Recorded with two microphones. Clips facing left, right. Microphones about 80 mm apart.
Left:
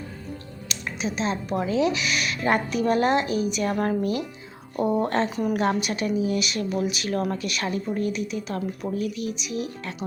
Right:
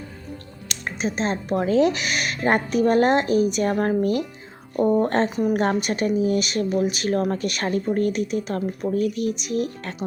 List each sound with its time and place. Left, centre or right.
0.7 s speech: right
4.8 s speech: centre
5.0 s speech: right